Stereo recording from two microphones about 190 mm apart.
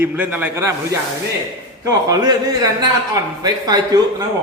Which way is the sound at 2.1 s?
20° right (ahead or behind).